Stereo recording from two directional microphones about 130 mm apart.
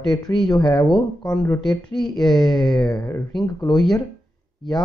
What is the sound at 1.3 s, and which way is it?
Speech, 10° left (ahead or behind).